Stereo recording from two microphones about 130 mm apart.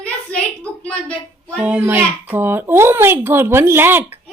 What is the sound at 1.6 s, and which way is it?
A child's voice, 10° right (ahead or behind).